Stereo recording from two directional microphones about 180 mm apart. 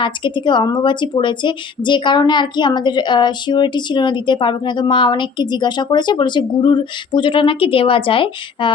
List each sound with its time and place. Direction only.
0.0 s speech: 25° left (ahead or behind)